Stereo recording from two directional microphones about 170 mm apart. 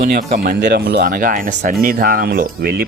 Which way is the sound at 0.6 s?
75° right (ahead or behind).